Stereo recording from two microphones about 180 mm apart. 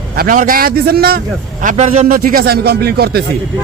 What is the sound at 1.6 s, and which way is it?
A man's voice, 45° right (ahead or behind).